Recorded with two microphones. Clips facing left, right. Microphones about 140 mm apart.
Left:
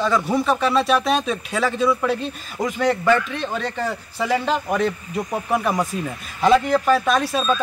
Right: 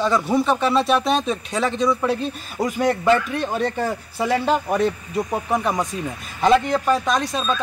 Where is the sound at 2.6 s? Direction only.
35° right (ahead or behind).